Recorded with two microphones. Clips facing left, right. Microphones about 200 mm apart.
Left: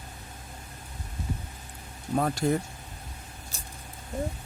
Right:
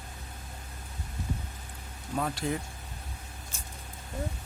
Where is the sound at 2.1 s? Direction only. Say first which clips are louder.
Left 6 dB; 45° left (ahead or behind).